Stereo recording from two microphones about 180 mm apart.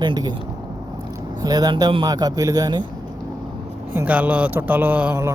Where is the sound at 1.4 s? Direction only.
20° right (ahead or behind).